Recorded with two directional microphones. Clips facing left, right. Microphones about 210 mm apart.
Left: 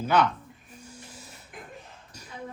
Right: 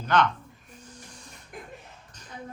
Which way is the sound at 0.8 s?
10° left (ahead or behind).